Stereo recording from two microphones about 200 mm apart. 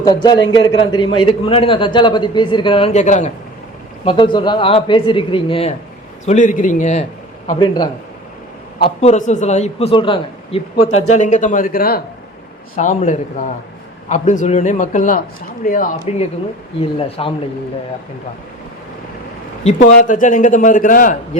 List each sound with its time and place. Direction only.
0.0 s a man's voice: 20° left (ahead or behind); by 3.3 s 35° left (ahead or behind)
4.0 s a man's voice: 25° left (ahead or behind)
6.2 s a man's voice: 40° left (ahead or behind)
7.6 s a man's voice: 20° left (ahead or behind)
8.8 s a man's voice: 35° left (ahead or behind)
19.6 s a man's voice: 40° left (ahead or behind)